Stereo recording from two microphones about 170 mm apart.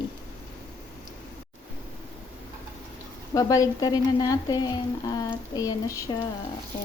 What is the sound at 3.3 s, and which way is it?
Speech, 20° left (ahead or behind).